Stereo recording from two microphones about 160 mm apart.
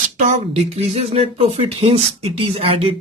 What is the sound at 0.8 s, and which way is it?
Speech, 40° right (ahead or behind).